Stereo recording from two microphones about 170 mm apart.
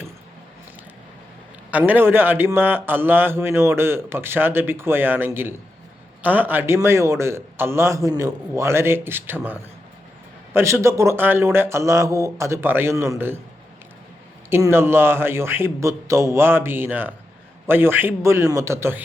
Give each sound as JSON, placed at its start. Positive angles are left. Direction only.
{"t": 1.7, "sound": "a man's voice", "side_deg": -10}
{"t": 14.5, "sound": "a man's voice", "side_deg": -15}